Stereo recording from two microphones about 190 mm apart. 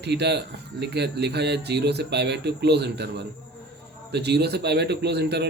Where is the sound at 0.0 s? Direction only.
60° right (ahead or behind).